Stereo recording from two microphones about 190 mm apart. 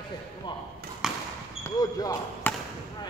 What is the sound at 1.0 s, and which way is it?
Basketball bounce, 5° right (ahead or behind).